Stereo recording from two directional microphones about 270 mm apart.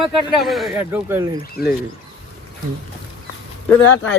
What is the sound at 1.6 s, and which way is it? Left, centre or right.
Speech, left.